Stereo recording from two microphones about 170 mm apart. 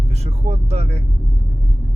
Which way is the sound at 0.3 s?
40° right (ahead or behind).